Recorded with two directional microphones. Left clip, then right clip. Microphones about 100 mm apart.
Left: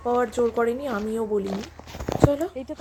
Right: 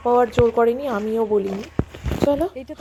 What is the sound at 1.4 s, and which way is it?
Speech, centre (ahead or behind).